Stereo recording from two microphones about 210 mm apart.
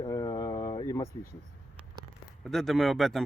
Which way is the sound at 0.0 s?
20° left (ahead or behind).